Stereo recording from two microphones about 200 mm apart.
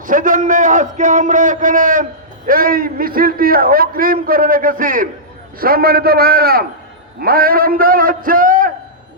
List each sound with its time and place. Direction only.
0.0 s a man's voice: 40° right (ahead or behind)